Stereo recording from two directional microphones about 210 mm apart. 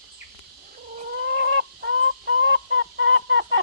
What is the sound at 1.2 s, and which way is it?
Fowl, 65° right (ahead or behind).